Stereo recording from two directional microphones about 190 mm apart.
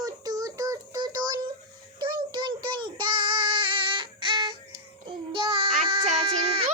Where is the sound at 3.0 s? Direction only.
25° right (ahead or behind).